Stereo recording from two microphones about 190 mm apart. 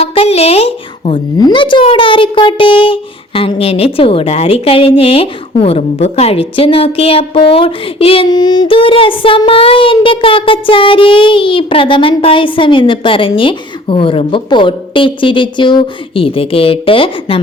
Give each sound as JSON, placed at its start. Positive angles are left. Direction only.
{"t": 0.0, "sound": "a woman's voice", "side_deg": 30}